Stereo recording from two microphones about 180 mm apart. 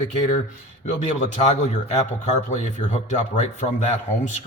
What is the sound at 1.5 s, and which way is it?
Speech, 35° left (ahead or behind).